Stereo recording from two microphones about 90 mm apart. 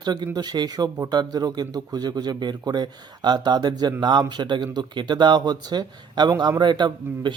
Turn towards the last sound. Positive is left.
turn(degrees=-55)  # may be behind; listen again after turning